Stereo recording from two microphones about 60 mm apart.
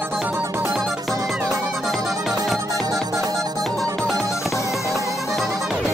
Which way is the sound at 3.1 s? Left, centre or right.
Right.